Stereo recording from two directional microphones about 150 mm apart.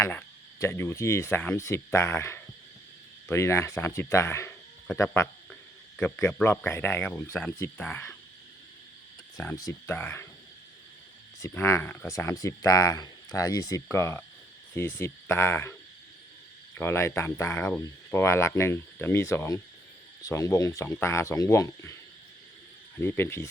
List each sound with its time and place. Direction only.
0.0 s speech: 10° left (ahead or behind)
9.4 s speech: 20° left (ahead or behind)
11.3 s speech: 20° left (ahead or behind)
16.7 s speech: 15° left (ahead or behind)
23.0 s speech: 15° left (ahead or behind)